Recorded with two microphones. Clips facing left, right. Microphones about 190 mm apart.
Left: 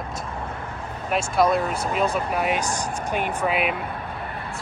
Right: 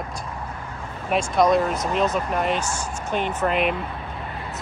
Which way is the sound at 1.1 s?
5° left (ahead or behind).